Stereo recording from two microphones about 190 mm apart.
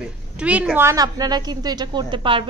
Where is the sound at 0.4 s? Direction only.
5° right (ahead or behind).